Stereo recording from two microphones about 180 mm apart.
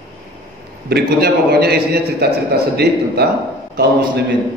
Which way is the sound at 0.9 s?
65° right (ahead or behind).